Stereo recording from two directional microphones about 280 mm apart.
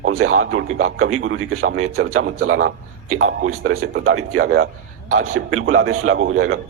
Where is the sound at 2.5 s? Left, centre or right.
Right.